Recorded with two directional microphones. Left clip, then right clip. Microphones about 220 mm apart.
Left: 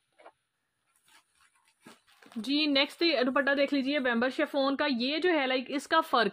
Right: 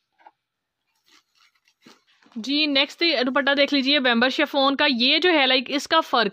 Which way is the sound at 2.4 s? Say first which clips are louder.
Right 6 dB; 25° right (ahead or behind).